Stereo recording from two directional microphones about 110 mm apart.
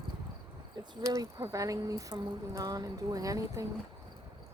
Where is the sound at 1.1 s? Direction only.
30° right (ahead or behind).